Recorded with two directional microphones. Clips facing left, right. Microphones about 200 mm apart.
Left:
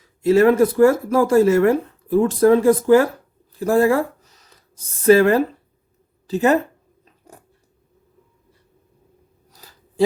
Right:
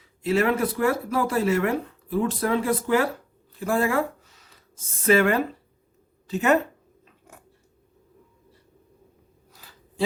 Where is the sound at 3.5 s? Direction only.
40° left (ahead or behind).